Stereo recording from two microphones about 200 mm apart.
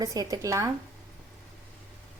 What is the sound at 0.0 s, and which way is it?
Speech, 20° right (ahead or behind).